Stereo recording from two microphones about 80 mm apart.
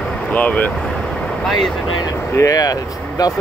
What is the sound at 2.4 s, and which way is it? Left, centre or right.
Speech, left.